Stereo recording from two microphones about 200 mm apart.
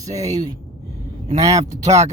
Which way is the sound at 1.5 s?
35° right (ahead or behind).